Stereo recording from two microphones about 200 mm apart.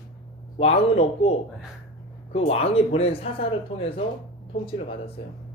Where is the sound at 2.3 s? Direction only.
30° left (ahead or behind).